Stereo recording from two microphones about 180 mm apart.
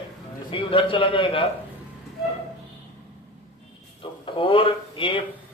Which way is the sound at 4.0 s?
30° left (ahead or behind).